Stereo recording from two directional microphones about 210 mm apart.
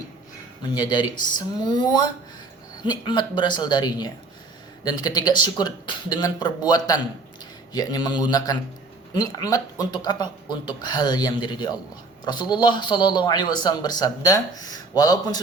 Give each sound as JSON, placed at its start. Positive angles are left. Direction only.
{"t": 0.8, "sound": "speech", "side_deg": 20}